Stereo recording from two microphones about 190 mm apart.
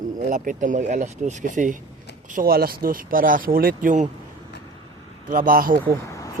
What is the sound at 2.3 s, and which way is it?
Speech, 50° right (ahead or behind).